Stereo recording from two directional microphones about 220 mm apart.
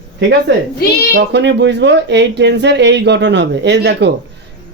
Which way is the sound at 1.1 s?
50° right (ahead or behind).